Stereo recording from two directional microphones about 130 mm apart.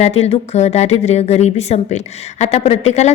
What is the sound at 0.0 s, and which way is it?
A woman's voice, 55° left (ahead or behind).